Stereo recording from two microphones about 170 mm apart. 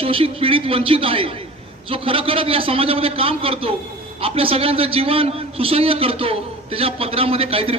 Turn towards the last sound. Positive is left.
turn(degrees=-35)  # may be behind; listen again after turning